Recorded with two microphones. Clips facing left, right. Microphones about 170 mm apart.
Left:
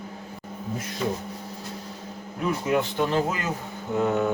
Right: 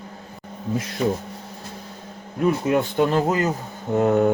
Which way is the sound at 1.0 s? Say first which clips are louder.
Right 5 dB; 50° right (ahead or behind).